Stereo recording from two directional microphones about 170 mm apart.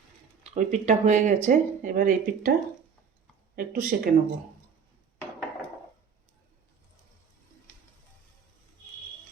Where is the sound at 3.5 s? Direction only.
60° right (ahead or behind).